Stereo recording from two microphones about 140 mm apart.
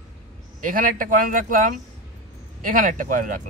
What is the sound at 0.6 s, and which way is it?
Speech, 75° right (ahead or behind).